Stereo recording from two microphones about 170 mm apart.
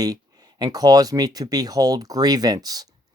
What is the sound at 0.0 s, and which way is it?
Speech, 20° right (ahead or behind).